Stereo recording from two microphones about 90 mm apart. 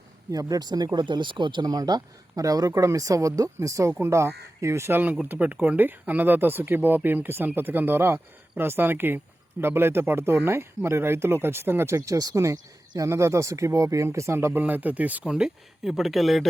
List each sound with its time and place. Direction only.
0.3 s speech: 40° right (ahead or behind)
0.9 s speech: 60° right (ahead or behind)
1.6 s speech: 45° right (ahead or behind); by 16.5 s centre (ahead or behind)